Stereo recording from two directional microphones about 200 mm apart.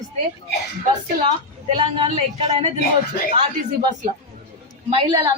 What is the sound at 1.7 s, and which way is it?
Speech, 25° right (ahead or behind).